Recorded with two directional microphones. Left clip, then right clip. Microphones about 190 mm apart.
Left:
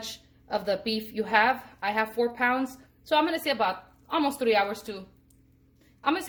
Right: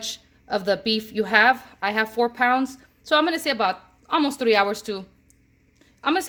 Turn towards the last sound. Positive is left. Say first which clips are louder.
# right 4 dB
turn(degrees=-55)  # may be behind; listen again after turning